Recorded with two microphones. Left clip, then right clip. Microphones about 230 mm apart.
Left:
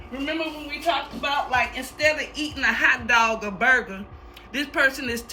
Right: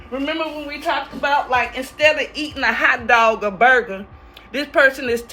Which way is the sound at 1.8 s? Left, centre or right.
Centre.